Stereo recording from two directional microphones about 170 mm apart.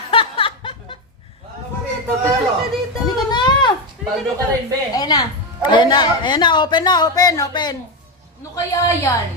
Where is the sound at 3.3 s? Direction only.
25° left (ahead or behind).